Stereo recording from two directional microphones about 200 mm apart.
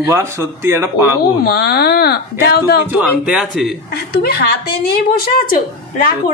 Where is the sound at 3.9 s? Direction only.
50° left (ahead or behind).